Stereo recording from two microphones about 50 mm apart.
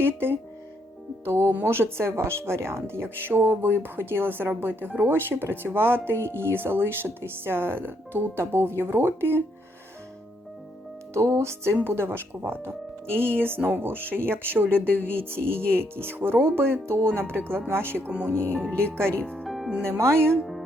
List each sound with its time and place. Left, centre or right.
1.2 s speech: right
1.6 s speech: right
11.1 s speech: right
18.3 s speech: left
19.5 s music: centre
20.0 s speech: right